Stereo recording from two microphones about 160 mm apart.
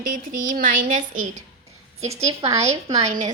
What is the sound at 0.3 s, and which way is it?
A woman's voice, 60° right (ahead or behind).